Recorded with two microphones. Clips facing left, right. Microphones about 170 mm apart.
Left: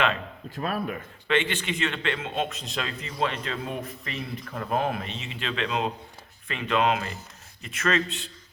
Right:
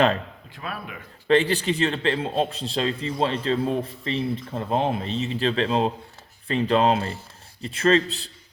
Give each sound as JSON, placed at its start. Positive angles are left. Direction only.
{"t": 0.5, "sound": "speech", "side_deg": 40}
{"t": 1.3, "sound": "a man's voice", "side_deg": -35}